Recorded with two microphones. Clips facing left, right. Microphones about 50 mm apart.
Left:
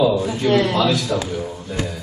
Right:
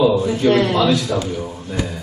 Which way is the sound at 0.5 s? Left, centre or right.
Centre.